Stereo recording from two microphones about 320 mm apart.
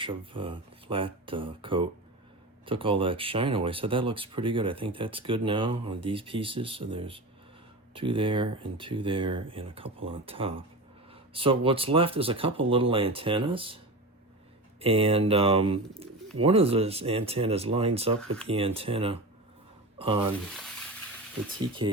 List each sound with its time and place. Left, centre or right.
0.0 s speech: centre
14.8 s speech: centre